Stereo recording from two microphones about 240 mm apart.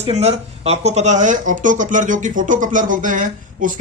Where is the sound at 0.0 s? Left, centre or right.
Right.